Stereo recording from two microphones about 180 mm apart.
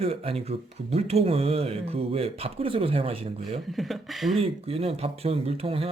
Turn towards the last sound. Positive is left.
turn(degrees=-30)  # may be behind; listen again after turning